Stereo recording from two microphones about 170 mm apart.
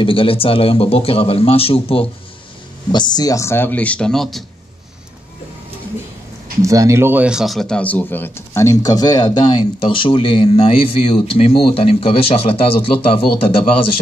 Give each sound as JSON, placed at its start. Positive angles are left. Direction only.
{"t": 0.0, "sound": "speech", "side_deg": 30}
{"t": 6.6, "sound": "speech", "side_deg": -20}